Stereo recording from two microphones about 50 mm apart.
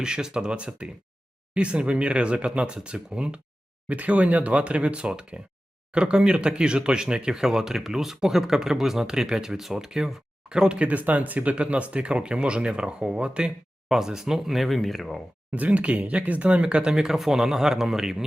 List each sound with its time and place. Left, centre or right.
0.0 s speech: centre
3.8 s speech: right
13.8 s speech: centre
15.5 s speech: right; by 18.3 s centre